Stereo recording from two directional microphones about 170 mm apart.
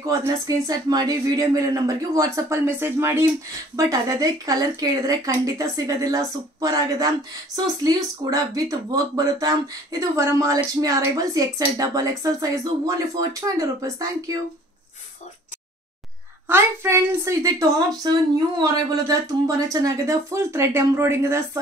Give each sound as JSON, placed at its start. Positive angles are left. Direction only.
{"t": 0.0, "sound": "speech", "side_deg": -20}
{"t": 16.4, "sound": "a woman's voice", "side_deg": -15}